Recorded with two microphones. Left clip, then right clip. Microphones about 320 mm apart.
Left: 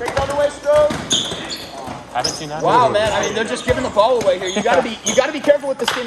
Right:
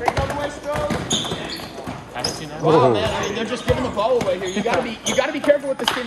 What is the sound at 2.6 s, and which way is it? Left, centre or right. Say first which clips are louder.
Speech: left 2 dB; left.